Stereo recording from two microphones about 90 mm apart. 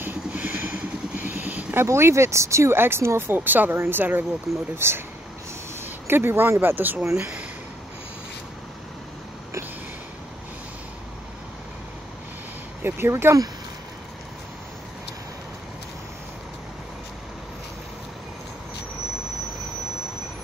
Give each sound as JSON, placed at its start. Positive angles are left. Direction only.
{"t": 0.0, "sound": "vehicle", "side_deg": -20}
{"t": 4.7, "sound": "speech", "side_deg": -25}
{"t": 6.0, "sound": "speech", "side_deg": -25}
{"t": 12.8, "sound": "speech", "side_deg": -25}